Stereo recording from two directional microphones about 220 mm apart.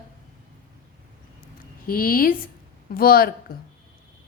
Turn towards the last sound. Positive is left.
turn(degrees=40)  # may be behind; listen again after turning